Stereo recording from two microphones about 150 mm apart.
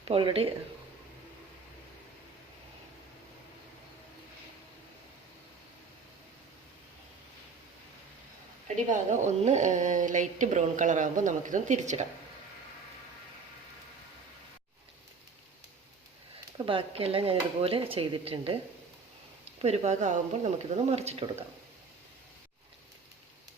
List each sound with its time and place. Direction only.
0.0 s speech: 35° right (ahead or behind)
8.6 s a woman's voice: 55° right (ahead or behind)
16.6 s speech: 35° right (ahead or behind)